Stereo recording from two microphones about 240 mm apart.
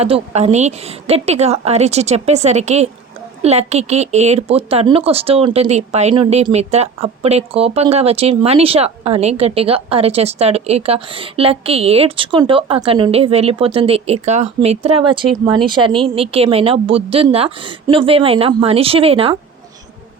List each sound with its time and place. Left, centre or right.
0.0 s speech: right